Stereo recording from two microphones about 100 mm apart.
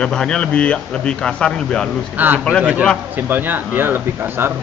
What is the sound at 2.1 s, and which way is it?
Speech, 15° right (ahead or behind).